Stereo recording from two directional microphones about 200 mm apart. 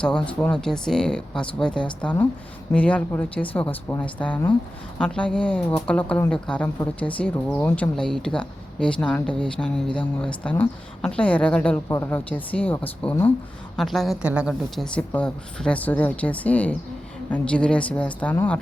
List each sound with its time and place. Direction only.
0.0 s a woman's voice: 5° left (ahead or behind)